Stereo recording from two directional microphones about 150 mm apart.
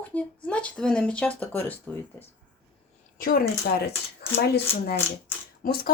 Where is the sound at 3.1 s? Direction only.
70° left (ahead or behind); by 4.9 s 90° left.